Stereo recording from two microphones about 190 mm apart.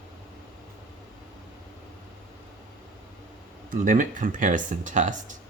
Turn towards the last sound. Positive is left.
turn(degrees=-40)  # may be behind; listen again after turning